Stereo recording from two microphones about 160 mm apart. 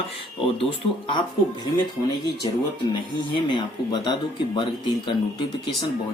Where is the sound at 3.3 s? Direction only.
30° left (ahead or behind).